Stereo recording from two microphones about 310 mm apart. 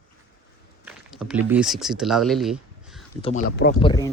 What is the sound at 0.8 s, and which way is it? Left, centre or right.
Speech, centre.